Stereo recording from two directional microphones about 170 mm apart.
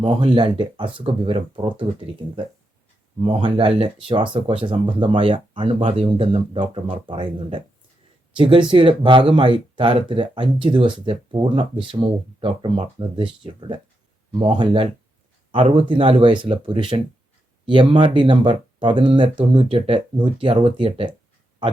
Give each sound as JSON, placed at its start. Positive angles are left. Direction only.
{"t": 0.0, "sound": "speech", "side_deg": -30}
{"t": 15.9, "sound": "speech", "side_deg": -30}